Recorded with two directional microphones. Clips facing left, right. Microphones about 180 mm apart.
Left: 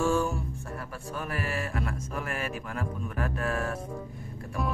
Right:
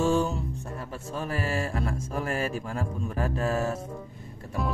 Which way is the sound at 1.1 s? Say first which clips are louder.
Right 3 dB; 30° right (ahead or behind).